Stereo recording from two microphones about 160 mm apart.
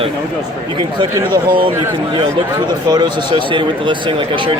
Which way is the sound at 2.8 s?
25° right (ahead or behind).